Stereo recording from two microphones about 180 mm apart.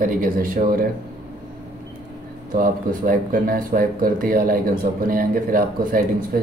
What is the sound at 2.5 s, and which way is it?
Speech, 50° right (ahead or behind).